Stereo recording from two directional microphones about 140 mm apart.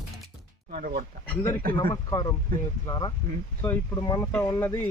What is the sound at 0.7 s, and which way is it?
Speech, 90° right.